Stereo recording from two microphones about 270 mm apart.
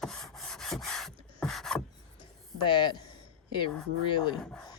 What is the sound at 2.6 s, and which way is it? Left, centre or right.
Speech, centre.